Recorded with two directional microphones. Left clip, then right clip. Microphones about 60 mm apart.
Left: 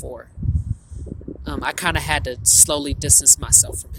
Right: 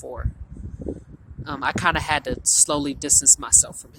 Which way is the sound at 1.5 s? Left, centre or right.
Left.